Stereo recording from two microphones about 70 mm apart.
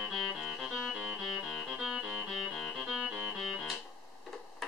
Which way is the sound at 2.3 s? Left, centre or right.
Centre.